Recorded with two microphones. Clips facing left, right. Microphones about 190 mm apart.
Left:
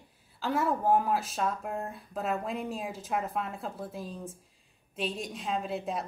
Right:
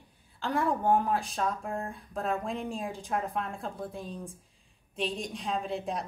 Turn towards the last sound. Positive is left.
turn(degrees=0)  # may be behind; listen again after turning